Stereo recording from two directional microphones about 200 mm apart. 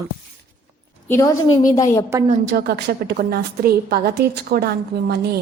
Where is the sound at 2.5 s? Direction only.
50° right (ahead or behind).